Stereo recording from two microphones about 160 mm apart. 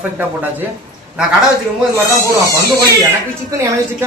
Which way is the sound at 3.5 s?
20° right (ahead or behind).